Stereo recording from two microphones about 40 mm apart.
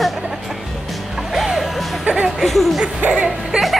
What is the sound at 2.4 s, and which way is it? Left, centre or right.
Speech, centre.